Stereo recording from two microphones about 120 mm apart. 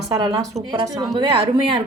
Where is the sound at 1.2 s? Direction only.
45° right (ahead or behind).